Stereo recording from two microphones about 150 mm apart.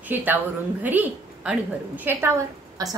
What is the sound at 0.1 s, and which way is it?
A woman's voice, 10° right (ahead or behind).